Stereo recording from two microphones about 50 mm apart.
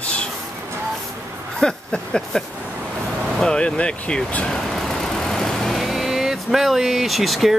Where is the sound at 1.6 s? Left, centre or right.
Centre.